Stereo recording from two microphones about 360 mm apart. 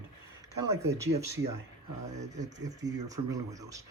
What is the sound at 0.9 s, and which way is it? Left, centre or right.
Speech, centre.